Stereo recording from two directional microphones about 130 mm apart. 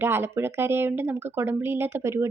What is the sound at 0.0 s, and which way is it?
A woman's voice, 15° right (ahead or behind).